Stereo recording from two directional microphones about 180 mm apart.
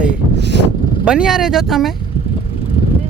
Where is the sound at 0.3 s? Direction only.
70° right (ahead or behind).